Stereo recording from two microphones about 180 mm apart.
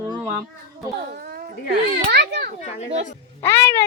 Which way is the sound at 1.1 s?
55° right (ahead or behind).